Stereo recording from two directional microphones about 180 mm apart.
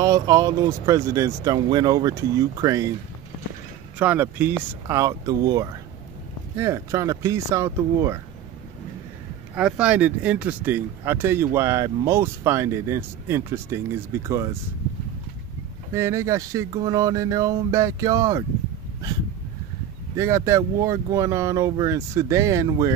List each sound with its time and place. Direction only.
0.0 s speech: 20° right (ahead or behind)
4.0 s speech: 10° right (ahead or behind)
9.6 s speech: 5° right (ahead or behind)
15.9 s speech: 15° right (ahead or behind)
20.2 s speech: 15° right (ahead or behind)